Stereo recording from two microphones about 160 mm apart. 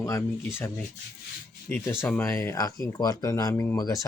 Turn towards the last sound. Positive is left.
turn(degrees=20)  # may be behind; listen again after turning